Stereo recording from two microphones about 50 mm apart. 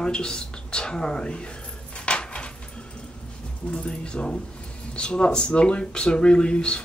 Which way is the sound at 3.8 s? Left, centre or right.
Left.